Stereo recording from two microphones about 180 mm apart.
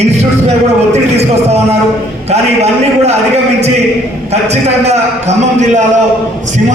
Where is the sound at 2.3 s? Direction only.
35° right (ahead or behind).